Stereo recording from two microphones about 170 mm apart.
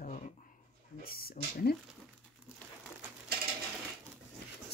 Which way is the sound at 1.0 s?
60° left (ahead or behind).